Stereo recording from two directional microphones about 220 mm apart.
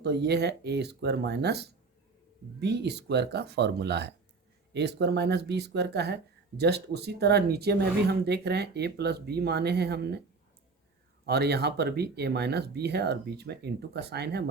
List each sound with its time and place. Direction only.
0.0 s speech: 50° right (ahead or behind)
11.3 s speech: 50° right (ahead or behind)